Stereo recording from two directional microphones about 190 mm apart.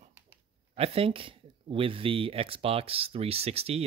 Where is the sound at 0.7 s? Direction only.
30° right (ahead or behind).